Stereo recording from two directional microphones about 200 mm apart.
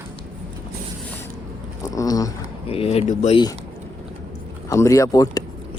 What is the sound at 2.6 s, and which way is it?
Speech, 30° left (ahead or behind).